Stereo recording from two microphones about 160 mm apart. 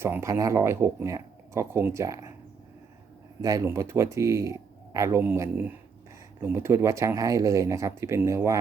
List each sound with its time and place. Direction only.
0.0 s speech: 15° right (ahead or behind)
3.4 s speech: 20° right (ahead or behind)